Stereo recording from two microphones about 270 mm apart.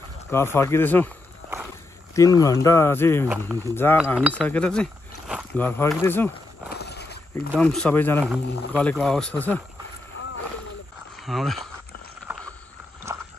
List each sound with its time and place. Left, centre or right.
0.3 s speech: centre
2.1 s speech: centre
6.8 s a sound: left
7.5 s speech: centre
11.1 s speech: centre
12.3 s vehicle: centre
13.1 s a sound: centre